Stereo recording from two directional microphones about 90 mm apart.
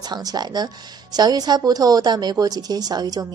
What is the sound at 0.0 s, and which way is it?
A woman's voice, 50° right (ahead or behind).